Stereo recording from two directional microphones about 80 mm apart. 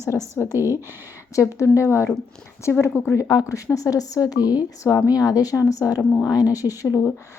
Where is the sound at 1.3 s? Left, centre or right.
Left.